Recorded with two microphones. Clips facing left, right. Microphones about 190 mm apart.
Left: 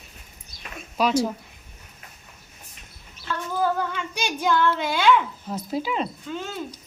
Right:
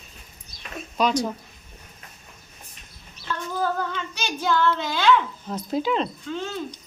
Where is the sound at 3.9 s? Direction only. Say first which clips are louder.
Left 1 dB; 10° left (ahead or behind).